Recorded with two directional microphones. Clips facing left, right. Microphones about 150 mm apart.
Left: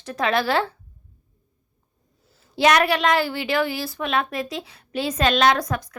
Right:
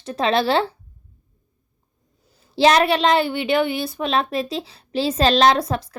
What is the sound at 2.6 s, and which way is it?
Speech, 25° right (ahead or behind).